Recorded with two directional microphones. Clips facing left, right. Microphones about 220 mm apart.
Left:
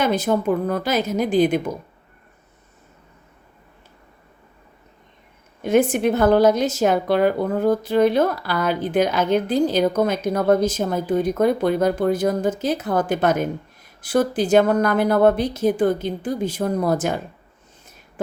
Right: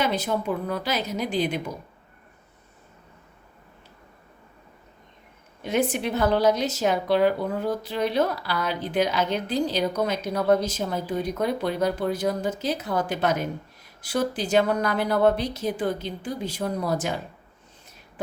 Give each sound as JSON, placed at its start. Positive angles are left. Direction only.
{"t": 0.0, "sound": "a woman's voice", "side_deg": 50}
{"t": 5.6, "sound": "a woman's voice", "side_deg": 50}